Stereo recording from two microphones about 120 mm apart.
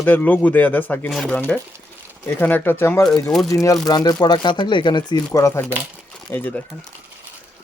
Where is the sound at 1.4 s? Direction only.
15° left (ahead or behind).